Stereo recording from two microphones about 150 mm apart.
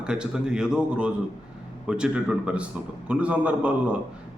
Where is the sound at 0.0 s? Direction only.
5° right (ahead or behind).